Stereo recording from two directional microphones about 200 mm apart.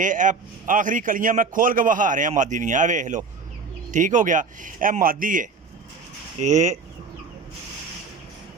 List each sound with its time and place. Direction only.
0.0 s a man's voice: 40° right (ahead or behind)